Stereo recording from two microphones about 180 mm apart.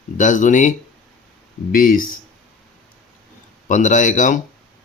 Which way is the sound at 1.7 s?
50° left (ahead or behind).